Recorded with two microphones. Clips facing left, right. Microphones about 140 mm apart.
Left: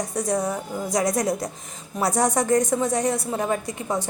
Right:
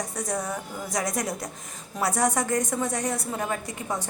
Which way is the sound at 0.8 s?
35° left (ahead or behind).